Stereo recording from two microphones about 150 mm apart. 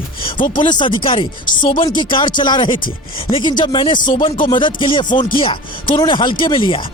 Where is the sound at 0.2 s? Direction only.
35° left (ahead or behind).